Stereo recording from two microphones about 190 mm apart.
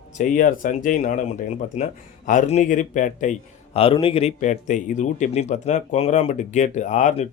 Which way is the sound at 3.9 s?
30° left (ahead or behind).